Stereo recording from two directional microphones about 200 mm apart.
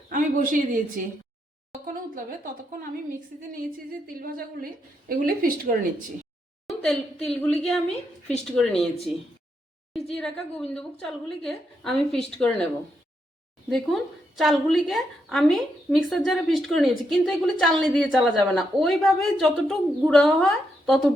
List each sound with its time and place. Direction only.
0.1 s a woman's voice: 40° right (ahead or behind)
1.9 s a sound: 45° right (ahead or behind)
4.0 s a woman's voice: 45° right (ahead or behind)
6.7 s a woman's voice: 5° left (ahead or behind)
9.9 s a woman's voice: centre (ahead or behind)
13.7 s a woman's voice: centre (ahead or behind)